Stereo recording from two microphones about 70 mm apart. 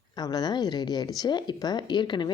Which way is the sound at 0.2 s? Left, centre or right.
Left.